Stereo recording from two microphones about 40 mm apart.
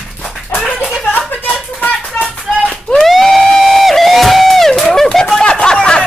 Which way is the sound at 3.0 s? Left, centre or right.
Centre.